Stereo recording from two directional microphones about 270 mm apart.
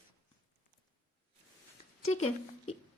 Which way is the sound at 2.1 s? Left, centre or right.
Left.